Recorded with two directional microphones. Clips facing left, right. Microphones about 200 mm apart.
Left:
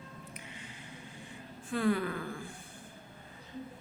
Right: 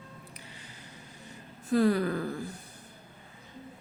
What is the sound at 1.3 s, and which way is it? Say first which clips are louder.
Speech: right 9 dB; 40° right (ahead or behind).